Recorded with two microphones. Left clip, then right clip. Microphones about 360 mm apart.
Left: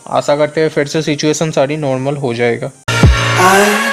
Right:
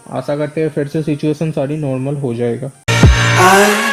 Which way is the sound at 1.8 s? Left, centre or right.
Left.